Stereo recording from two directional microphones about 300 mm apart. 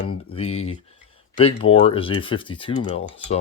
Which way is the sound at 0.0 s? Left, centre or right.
Left.